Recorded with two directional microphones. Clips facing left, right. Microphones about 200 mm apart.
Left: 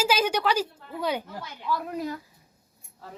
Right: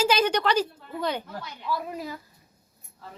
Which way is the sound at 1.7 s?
5° right (ahead or behind).